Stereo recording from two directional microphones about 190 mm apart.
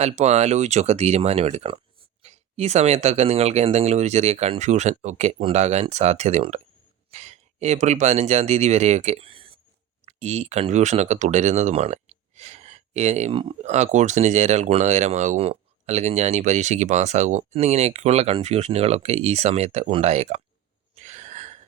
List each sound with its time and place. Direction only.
0.0 s speech: 35° right (ahead or behind)
20.9 s gasp: 40° right (ahead or behind)